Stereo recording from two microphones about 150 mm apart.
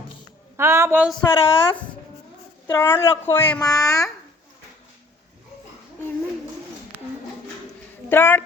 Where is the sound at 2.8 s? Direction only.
15° left (ahead or behind).